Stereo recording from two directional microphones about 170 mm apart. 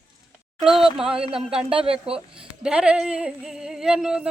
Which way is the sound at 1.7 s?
35° right (ahead or behind).